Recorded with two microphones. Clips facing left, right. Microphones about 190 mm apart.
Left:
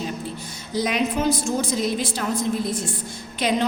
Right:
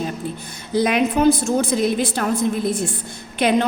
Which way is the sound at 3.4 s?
60° right (ahead or behind).